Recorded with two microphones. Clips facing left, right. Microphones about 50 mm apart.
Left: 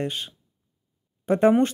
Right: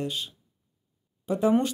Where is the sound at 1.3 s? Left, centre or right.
Left.